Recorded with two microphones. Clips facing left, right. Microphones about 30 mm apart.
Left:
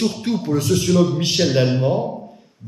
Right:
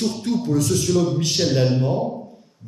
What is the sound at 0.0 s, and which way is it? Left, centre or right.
Speech, left.